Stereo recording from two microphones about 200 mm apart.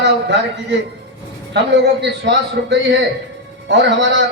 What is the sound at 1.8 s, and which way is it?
A man's voice, 60° right (ahead or behind).